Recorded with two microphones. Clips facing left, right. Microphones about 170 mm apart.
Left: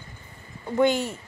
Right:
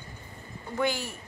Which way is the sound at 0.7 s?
20° left (ahead or behind).